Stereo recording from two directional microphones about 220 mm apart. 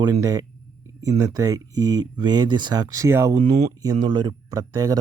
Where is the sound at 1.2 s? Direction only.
15° right (ahead or behind).